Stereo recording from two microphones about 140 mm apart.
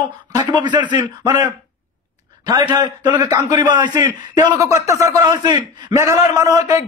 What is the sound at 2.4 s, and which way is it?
A man's voice, 30° right (ahead or behind).